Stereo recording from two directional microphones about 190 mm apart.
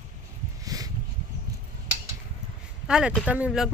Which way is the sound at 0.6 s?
20° right (ahead or behind).